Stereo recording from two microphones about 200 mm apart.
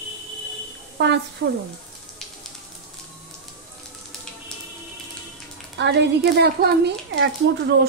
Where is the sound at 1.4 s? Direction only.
75° right (ahead or behind).